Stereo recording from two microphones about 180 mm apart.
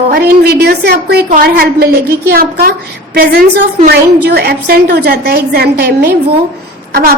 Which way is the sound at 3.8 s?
65° right (ahead or behind).